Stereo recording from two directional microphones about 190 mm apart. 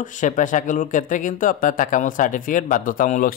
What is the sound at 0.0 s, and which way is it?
Speech, 40° left (ahead or behind).